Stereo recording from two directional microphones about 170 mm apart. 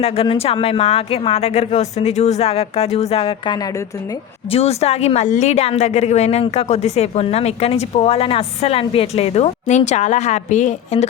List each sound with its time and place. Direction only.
0.0 s a woman's voice: 35° left (ahead or behind)
4.4 s a woman's voice: 35° left (ahead or behind)